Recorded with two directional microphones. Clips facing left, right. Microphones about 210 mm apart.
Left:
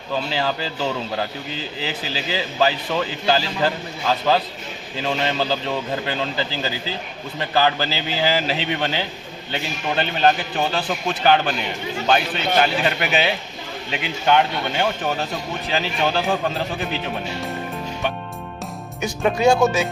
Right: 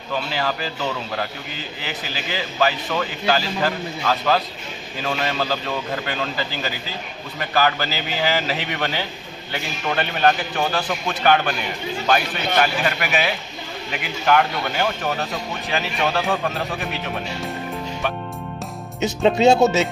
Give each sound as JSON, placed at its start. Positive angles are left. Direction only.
{"t": 0.3, "sound": "a man's voice", "side_deg": 30}
{"t": 18.9, "sound": "speech", "side_deg": -20}